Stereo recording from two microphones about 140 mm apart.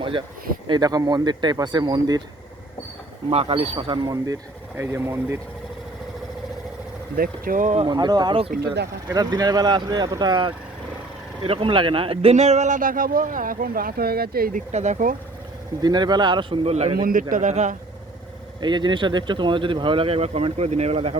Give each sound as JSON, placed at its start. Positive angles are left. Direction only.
{"t": 0.0, "sound": "speech", "side_deg": -40}
{"t": 3.2, "sound": "speech", "side_deg": -40}
{"t": 4.8, "sound": "speech", "side_deg": -20}
{"t": 7.2, "sound": "speech", "side_deg": -85}
{"t": 7.9, "sound": "speech", "side_deg": -30}
{"t": 14.7, "sound": "speech", "side_deg": -55}
{"t": 15.8, "sound": "speech", "side_deg": -30}
{"t": 17.0, "sound": "speech", "side_deg": -75}
{"t": 18.6, "sound": "speech", "side_deg": -35}